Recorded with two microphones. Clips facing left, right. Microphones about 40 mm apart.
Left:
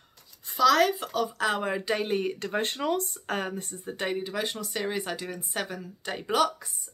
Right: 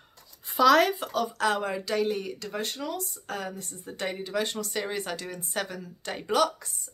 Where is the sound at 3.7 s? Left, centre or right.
Centre.